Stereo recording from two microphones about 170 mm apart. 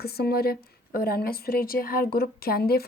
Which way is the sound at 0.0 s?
65° left (ahead or behind).